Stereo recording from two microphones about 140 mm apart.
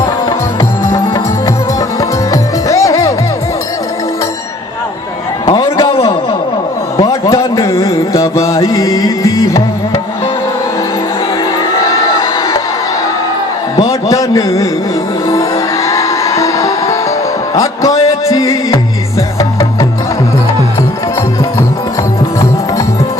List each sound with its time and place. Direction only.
2.0 s music: 25° left (ahead or behind)
5.5 s a sound: 25° left (ahead or behind)
6.9 s music: 20° left (ahead or behind)
11.7 s crowd: 20° left (ahead or behind)
13.7 s music: 25° left (ahead or behind)